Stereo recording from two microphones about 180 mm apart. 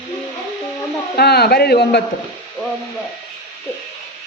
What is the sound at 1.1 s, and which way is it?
Speech, 65° left (ahead or behind).